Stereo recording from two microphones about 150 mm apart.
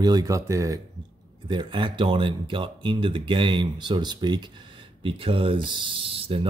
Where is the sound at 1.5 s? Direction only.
35° right (ahead or behind).